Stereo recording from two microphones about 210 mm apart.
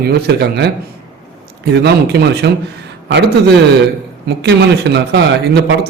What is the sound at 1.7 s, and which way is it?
A man's voice, 50° right (ahead or behind).